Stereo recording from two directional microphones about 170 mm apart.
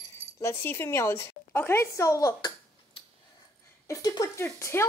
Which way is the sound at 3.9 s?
20° left (ahead or behind).